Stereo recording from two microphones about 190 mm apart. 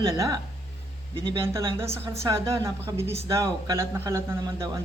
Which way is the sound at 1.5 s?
15° right (ahead or behind).